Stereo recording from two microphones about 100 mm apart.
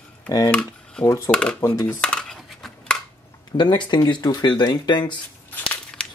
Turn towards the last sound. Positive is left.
turn(degrees=15)  # may be behind; listen again after turning